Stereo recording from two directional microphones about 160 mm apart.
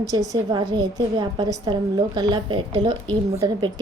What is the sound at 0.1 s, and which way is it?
A woman's voice, 25° right (ahead or behind).